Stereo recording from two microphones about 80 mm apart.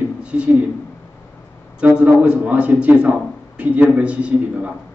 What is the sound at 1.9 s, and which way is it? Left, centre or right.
Speech, centre.